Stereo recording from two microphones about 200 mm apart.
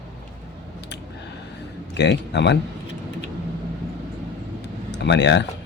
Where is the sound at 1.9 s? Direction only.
60° left (ahead or behind).